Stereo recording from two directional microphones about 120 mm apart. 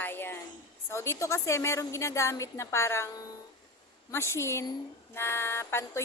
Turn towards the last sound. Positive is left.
turn(degrees=20)  # may be behind; listen again after turning